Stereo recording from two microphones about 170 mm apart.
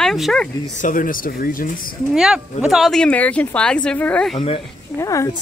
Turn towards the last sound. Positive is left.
turn(degrees=20)  # may be behind; listen again after turning